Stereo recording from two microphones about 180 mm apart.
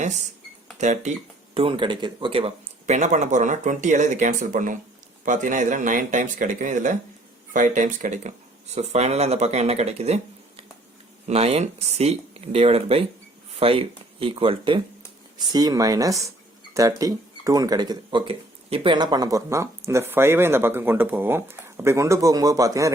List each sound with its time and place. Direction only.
0.8 s speech: 40° right (ahead or behind)
1.5 s speech: 30° right (ahead or behind)
11.3 s speech: 35° right (ahead or behind); by 22.9 s 20° right (ahead or behind)